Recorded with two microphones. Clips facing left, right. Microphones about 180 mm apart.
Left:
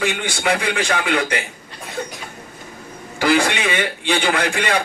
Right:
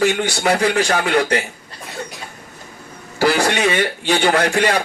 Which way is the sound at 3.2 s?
40° right (ahead or behind).